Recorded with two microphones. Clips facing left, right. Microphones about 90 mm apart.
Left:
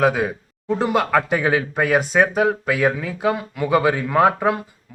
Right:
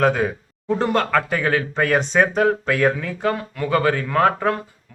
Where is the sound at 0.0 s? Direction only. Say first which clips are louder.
Even; 5° left (ahead or behind).